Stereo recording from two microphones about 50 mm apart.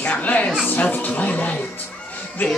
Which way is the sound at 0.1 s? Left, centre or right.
Left.